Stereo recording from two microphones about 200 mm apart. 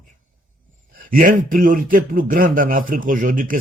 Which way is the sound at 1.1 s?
40° right (ahead or behind).